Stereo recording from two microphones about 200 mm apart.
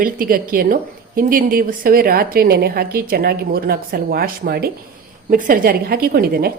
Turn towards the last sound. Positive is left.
turn(degrees=-50)  # may be behind; listen again after turning